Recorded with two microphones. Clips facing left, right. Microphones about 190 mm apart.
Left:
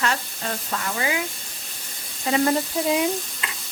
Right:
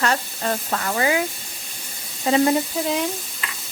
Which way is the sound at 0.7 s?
50° right (ahead or behind).